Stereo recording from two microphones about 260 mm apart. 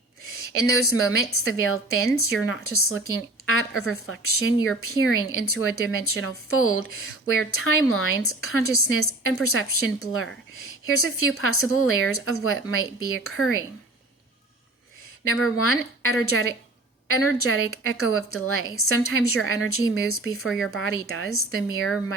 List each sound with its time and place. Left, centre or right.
0.4 s a woman's voice: left
15.2 s a woman's voice: left